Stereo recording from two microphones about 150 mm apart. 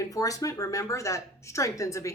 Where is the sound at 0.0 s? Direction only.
25° left (ahead or behind).